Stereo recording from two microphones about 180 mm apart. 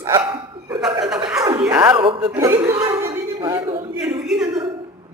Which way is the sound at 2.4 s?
15° right (ahead or behind).